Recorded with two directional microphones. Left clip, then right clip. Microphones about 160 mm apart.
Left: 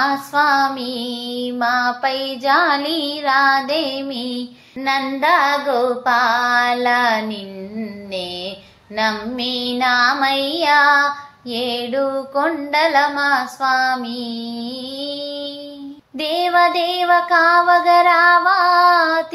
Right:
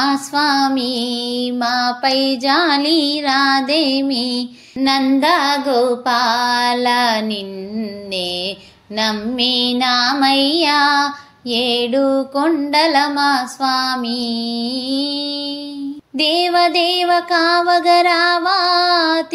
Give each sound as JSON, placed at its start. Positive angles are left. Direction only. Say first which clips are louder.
{"t": 0.0, "sound": "music", "louder": "even", "side_deg": -40}